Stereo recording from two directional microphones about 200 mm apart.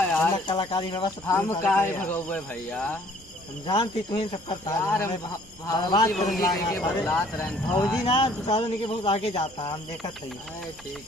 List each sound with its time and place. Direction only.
0.0 s a sound: 5° left (ahead or behind)
0.3 s speech: 25° left (ahead or behind)
1.3 s speech: 10° left (ahead or behind)
3.6 s speech: 25° left (ahead or behind)
4.8 s speech: 15° left (ahead or behind)
6.1 s speech: centre (ahead or behind); by 9.4 s 30° left (ahead or behind)